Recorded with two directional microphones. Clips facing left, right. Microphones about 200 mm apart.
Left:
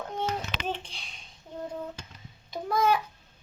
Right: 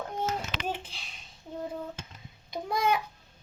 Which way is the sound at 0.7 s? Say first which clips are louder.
Left 1 dB; 5° right (ahead or behind).